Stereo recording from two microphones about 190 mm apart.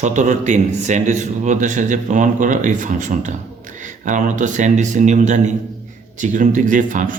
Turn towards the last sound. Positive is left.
turn(degrees=-45)  # may be behind; listen again after turning